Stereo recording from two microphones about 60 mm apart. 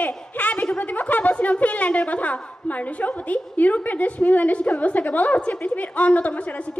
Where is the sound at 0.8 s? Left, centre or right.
Left.